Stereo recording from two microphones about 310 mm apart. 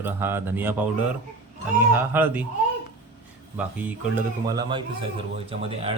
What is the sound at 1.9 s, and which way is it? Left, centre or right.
Speech, centre.